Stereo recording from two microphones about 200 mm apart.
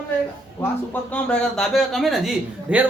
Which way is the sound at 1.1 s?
5° left (ahead or behind).